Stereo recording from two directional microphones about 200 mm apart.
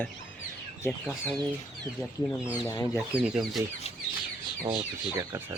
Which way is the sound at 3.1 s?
Centre (ahead or behind).